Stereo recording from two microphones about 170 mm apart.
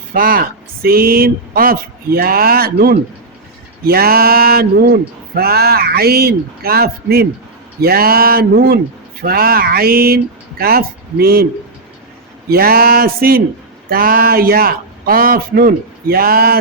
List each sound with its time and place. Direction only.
0.1 s speech: 55° right (ahead or behind)
12.5 s speech: 60° right (ahead or behind)